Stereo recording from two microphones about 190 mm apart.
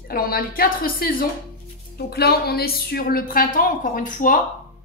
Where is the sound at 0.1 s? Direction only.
50° left (ahead or behind).